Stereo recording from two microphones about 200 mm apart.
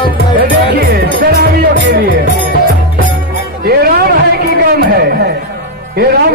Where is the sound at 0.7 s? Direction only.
55° right (ahead or behind).